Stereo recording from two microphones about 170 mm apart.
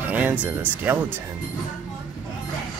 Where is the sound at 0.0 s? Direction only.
10° right (ahead or behind).